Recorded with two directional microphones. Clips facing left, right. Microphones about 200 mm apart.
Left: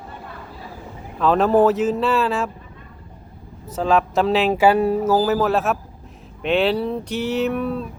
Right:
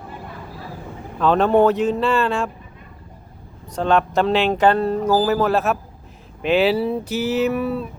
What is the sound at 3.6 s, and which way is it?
Speech, 5° left (ahead or behind).